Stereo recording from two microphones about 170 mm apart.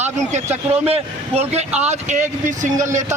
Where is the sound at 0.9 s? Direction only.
35° right (ahead or behind).